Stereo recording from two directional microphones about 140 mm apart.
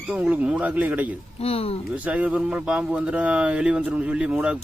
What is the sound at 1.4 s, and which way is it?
Speech, 45° left (ahead or behind).